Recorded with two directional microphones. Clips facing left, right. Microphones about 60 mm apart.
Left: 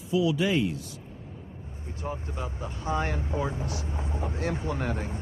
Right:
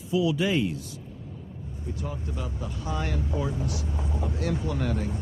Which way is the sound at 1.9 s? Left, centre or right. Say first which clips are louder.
Even; left.